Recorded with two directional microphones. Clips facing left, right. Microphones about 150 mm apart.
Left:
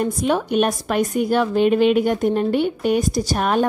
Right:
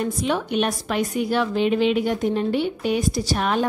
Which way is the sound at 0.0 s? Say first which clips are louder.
Left 3 dB; 45° left (ahead or behind).